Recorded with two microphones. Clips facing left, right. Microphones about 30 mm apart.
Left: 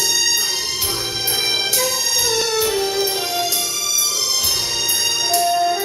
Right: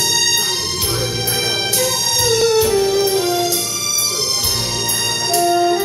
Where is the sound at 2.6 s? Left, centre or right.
Left.